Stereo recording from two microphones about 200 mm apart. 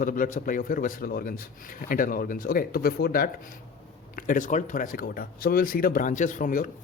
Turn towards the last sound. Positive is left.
turn(degrees=40)  # may be behind; listen again after turning